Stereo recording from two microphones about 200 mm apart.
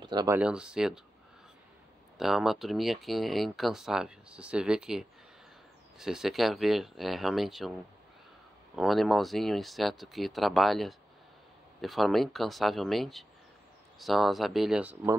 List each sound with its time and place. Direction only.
0.0 s speech: 20° right (ahead or behind)
0.4 s speech: 5° right (ahead or behind)
2.1 s speech: centre (ahead or behind)
8.7 s speech: centre (ahead or behind)